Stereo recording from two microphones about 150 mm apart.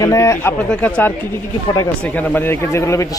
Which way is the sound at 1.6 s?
25° left (ahead or behind).